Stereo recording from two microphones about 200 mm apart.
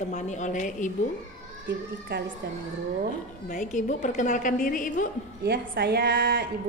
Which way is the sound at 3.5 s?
40° left (ahead or behind).